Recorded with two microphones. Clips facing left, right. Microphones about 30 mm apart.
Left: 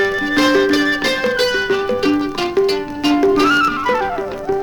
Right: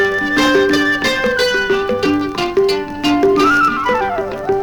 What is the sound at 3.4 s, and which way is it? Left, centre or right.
Flute, left.